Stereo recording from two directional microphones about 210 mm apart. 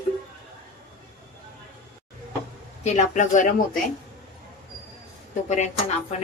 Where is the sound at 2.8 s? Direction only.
30° left (ahead or behind).